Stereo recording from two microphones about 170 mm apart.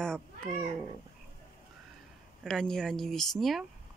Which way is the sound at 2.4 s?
5° left (ahead or behind).